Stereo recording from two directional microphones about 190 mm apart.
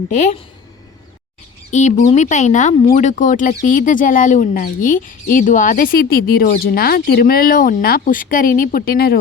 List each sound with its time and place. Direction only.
0.1 s speech: 40° left (ahead or behind)
1.7 s speech: 40° left (ahead or behind)